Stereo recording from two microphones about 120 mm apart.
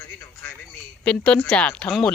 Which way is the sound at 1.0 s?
10° left (ahead or behind).